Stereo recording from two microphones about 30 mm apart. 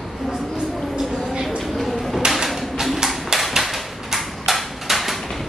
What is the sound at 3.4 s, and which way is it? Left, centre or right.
Hammer, centre.